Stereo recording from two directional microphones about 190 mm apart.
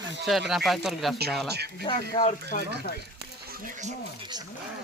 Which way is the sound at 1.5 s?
60° right (ahead or behind).